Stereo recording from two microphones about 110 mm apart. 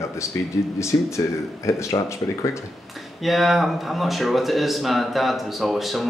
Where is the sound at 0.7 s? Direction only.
25° left (ahead or behind).